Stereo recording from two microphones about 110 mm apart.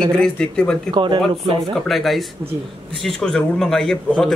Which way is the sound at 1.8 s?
Centre (ahead or behind).